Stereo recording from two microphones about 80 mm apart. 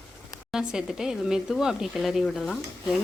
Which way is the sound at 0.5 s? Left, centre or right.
Centre.